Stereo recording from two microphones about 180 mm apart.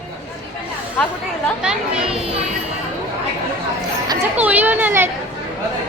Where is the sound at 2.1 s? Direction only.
35° right (ahead or behind).